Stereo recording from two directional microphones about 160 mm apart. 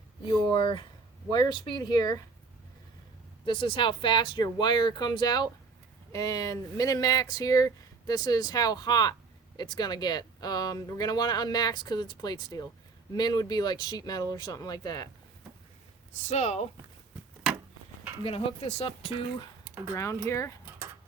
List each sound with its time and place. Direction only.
0.5 s speech: 30° left (ahead or behind)
3.4 s speech: 30° left (ahead or behind)
16.3 s speech: 45° left (ahead or behind)
18.2 s speech: 35° left (ahead or behind)
19.6 s a sound: 10° right (ahead or behind)
20.2 s speech: 15° left (ahead or behind)